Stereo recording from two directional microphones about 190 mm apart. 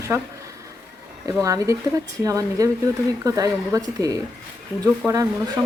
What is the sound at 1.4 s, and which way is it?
Speech, 15° right (ahead or behind).